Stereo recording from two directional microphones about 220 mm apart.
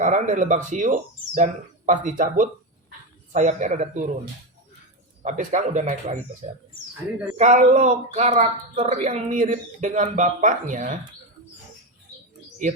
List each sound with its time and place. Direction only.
0.0 s speech: 35° right (ahead or behind)
5.2 s speech: 35° right (ahead or behind)
7.3 s speech: 35° right (ahead or behind)